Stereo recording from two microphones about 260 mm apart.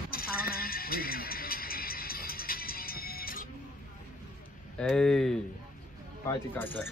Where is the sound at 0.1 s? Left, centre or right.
Left.